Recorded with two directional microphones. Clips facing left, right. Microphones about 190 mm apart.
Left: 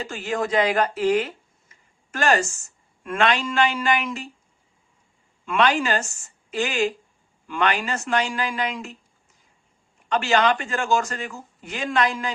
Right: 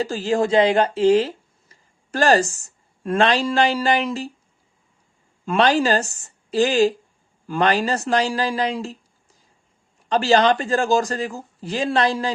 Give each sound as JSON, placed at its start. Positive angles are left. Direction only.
{"t": 0.0, "sound": "speech", "side_deg": -30}
{"t": 5.5, "sound": "speech", "side_deg": -35}
{"t": 10.1, "sound": "speech", "side_deg": -35}